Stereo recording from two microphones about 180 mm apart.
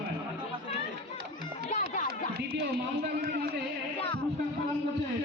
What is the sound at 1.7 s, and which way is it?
Music, 45° left (ahead or behind).